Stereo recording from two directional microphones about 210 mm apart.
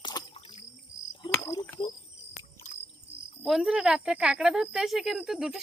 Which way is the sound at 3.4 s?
Centre (ahead or behind).